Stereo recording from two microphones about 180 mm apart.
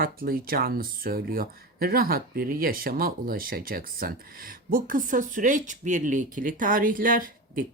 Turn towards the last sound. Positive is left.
turn(degrees=-50)  # may be behind; listen again after turning